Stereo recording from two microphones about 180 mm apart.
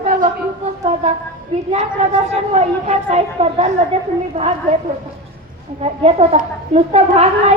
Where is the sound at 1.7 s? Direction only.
40° right (ahead or behind).